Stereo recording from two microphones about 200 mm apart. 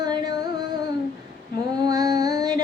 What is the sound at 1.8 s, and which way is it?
Female singing, 20° right (ahead or behind).